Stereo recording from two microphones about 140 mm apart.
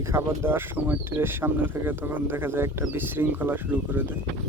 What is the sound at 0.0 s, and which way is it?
Speech, 20° right (ahead or behind).